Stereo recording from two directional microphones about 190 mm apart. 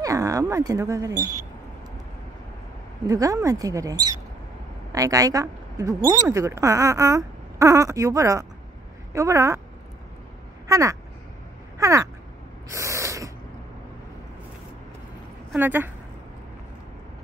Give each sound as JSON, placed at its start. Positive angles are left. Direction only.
{"t": 0.0, "sound": "speech", "side_deg": -15}
{"t": 3.1, "sound": "a woman's voice", "side_deg": -15}
{"t": 10.7, "sound": "speech", "side_deg": -15}
{"t": 11.8, "sound": "crow", "side_deg": -15}
{"t": 12.6, "sound": "a sound", "side_deg": -15}
{"t": 15.5, "sound": "speech", "side_deg": -10}